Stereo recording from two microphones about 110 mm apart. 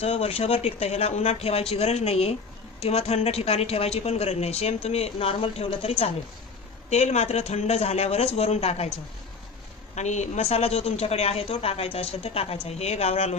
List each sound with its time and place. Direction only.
0.0 s a woman's voice: 65° left (ahead or behind)
6.9 s a woman's voice: 80° left
9.9 s a woman's voice: 90° left; by 13.3 s 75° left (ahead or behind)